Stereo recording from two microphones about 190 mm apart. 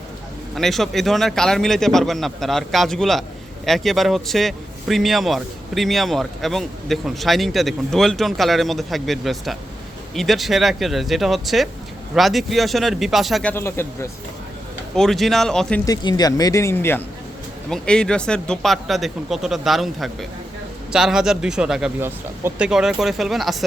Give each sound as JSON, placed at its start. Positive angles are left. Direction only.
{"t": 0.5, "sound": "speech", "side_deg": 0}
{"t": 14.9, "sound": "speech", "side_deg": 0}
{"t": 15.9, "sound": "speech", "side_deg": 20}